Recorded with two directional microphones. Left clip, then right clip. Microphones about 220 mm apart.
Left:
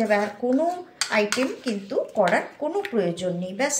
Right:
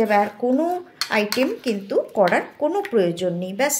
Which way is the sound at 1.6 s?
45° right (ahead or behind).